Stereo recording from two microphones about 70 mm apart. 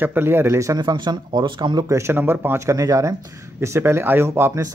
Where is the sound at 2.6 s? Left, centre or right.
Right.